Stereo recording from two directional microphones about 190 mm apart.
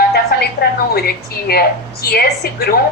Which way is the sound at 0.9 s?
55° left (ahead or behind).